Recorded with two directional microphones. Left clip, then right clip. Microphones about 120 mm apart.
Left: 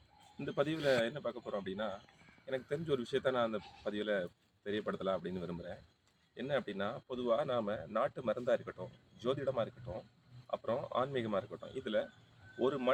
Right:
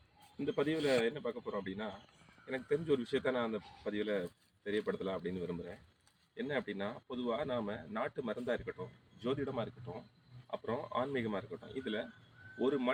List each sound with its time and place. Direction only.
0.5 s speech: 30° left (ahead or behind)
6.3 s speech: 30° left (ahead or behind)